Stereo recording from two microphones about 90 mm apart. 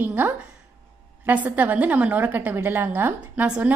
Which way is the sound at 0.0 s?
20° right (ahead or behind).